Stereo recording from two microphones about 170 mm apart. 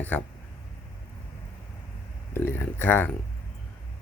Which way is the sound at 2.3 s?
15° left (ahead or behind).